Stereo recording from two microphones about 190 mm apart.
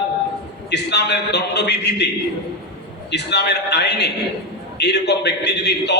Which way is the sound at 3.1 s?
60° left (ahead or behind).